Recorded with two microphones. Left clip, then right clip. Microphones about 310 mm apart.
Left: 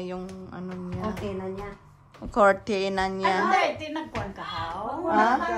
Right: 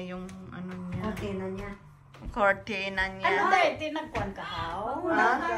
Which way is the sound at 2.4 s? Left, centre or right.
Centre.